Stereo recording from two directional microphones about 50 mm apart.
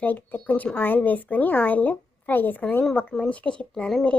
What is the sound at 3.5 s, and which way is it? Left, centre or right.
Speech, centre.